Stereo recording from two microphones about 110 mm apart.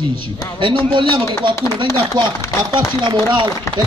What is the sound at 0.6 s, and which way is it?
Speech, 50° right (ahead or behind).